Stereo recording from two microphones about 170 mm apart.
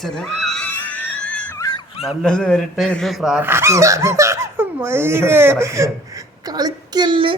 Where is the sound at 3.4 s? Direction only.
15° right (ahead or behind).